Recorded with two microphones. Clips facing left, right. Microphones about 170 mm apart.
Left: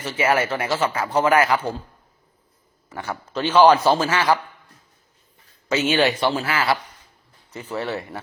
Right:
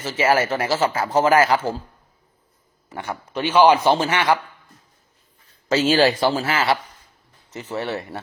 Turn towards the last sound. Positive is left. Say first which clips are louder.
# right 1 dB
turn(degrees=-25)  # may be behind; listen again after turning